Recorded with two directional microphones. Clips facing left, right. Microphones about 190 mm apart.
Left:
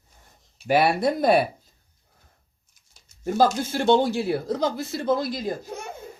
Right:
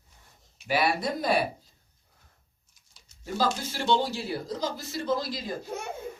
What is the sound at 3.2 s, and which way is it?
Speech, 45° left (ahead or behind).